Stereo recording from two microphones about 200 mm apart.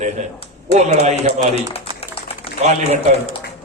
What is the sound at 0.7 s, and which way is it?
Speech, 35° right (ahead or behind).